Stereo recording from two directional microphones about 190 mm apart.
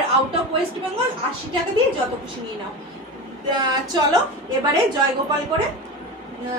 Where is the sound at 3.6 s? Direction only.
20° right (ahead or behind).